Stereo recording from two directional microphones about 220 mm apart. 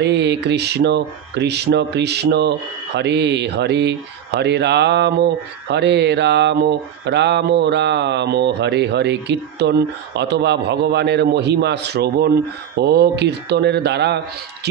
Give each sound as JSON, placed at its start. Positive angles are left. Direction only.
{"t": 0.0, "sound": "speech", "side_deg": -50}